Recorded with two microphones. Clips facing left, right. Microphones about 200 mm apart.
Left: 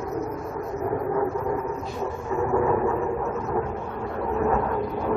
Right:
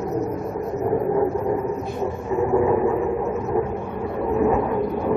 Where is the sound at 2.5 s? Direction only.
20° right (ahead or behind).